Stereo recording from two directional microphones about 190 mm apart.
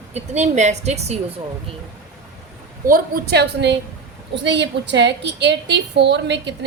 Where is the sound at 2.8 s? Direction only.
50° right (ahead or behind).